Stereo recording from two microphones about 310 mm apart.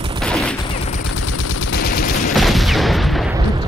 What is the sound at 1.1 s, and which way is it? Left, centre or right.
Machine gun, left.